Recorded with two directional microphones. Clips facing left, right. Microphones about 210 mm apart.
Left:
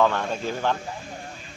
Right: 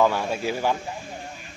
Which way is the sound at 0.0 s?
10° right (ahead or behind).